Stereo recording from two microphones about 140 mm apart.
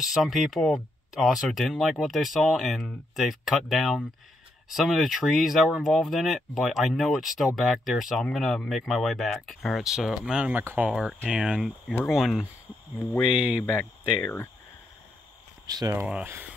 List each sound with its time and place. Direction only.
0.0 s speech: centre (ahead or behind)
14.2 s speech: 15° left (ahead or behind)
15.7 s speech: 25° right (ahead or behind)
16.1 s speech: 10° right (ahead or behind)